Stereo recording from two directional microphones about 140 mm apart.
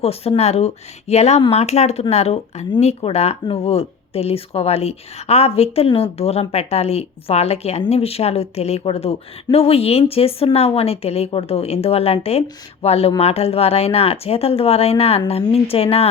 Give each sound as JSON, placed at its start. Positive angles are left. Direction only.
{"t": 0.0, "sound": "speech", "side_deg": 45}